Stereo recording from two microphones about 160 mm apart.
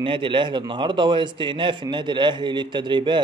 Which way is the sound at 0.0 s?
30° right (ahead or behind).